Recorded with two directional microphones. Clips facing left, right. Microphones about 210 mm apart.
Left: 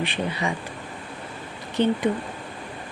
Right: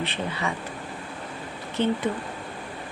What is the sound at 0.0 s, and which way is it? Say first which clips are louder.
Speech: left 2 dB; 15° left (ahead or behind).